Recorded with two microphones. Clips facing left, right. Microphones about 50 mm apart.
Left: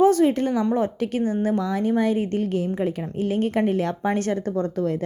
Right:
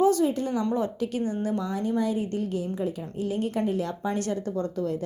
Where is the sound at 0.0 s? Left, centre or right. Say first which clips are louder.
Left 5 dB; left.